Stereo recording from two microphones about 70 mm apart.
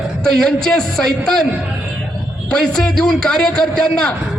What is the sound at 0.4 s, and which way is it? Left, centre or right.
A man's voice, centre.